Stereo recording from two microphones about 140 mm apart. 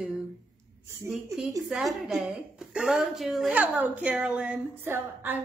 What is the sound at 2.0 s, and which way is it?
A woman's voice, centre (ahead or behind).